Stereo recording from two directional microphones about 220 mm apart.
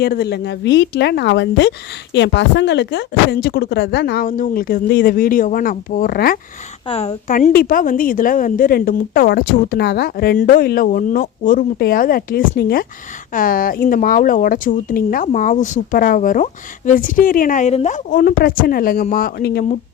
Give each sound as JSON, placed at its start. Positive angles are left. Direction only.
{"t": 0.0, "sound": "speech", "side_deg": 45}
{"t": 6.8, "sound": "speech", "side_deg": 25}